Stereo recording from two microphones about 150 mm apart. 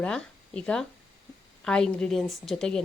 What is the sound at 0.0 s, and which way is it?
A woman's voice, 5° left (ahead or behind).